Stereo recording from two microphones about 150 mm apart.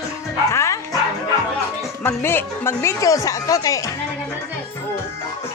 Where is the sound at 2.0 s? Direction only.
15° left (ahead or behind).